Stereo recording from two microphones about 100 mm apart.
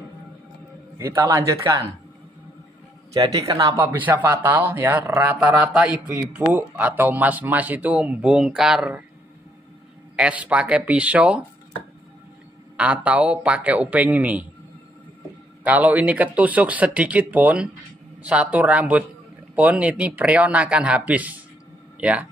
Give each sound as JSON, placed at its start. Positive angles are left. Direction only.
{"t": 1.2, "sound": "speech", "side_deg": -30}
{"t": 3.1, "sound": "speech", "side_deg": -35}
{"t": 3.7, "sound": "speech", "side_deg": -25}
{"t": 10.1, "sound": "speech", "side_deg": -15}
{"t": 12.7, "sound": "speech", "side_deg": -15}
{"t": 15.6, "sound": "speech", "side_deg": -15}